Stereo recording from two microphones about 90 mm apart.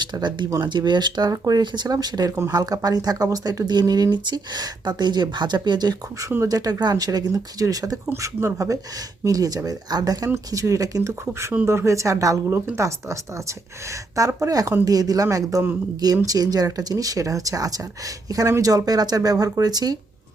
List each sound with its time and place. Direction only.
0.0 s speech: 55° right (ahead or behind)
11.5 s speech: 25° right (ahead or behind); by 20.0 s 45° right (ahead or behind)